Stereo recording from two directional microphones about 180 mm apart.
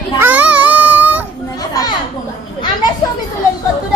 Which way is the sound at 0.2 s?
10° right (ahead or behind).